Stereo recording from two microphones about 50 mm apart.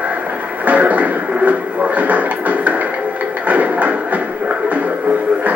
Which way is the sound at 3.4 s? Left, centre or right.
Right.